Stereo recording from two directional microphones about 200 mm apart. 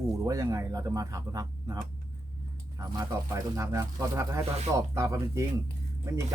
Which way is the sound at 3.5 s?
15° right (ahead or behind).